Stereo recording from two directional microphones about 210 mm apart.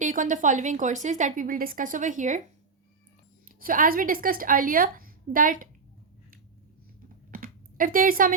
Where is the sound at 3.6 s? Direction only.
40° right (ahead or behind).